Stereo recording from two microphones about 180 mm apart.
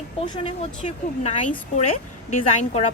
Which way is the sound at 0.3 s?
30° left (ahead or behind).